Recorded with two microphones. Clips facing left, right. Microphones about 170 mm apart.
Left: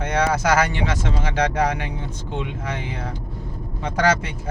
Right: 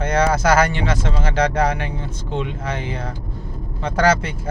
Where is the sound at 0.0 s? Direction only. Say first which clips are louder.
Right 3 dB; 15° left (ahead or behind).